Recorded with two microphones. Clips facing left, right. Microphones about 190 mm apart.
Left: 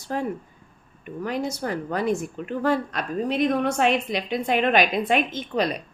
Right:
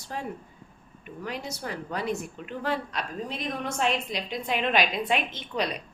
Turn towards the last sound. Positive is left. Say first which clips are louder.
# left 6 dB
turn(degrees=50)  # may be behind; listen again after turning